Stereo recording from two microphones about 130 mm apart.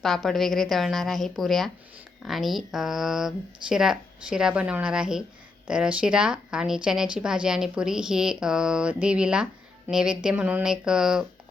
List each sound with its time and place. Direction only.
0.0 s speech: centre (ahead or behind)